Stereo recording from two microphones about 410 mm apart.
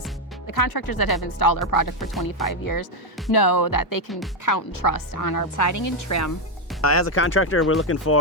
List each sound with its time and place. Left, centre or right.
0.4 s speech: left
2.0 s speech: centre
2.5 s a woman's voice: left